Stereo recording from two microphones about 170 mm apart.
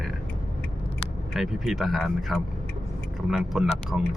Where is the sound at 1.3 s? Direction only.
Centre (ahead or behind).